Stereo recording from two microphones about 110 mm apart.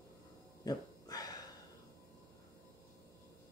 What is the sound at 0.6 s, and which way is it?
Dog, 35° left (ahead or behind).